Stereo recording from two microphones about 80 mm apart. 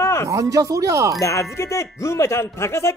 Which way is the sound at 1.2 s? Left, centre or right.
Left.